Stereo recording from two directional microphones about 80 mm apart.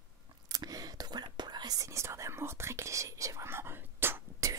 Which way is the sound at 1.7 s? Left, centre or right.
Right.